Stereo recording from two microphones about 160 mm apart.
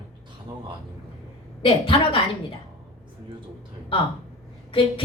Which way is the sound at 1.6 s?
35° left (ahead or behind).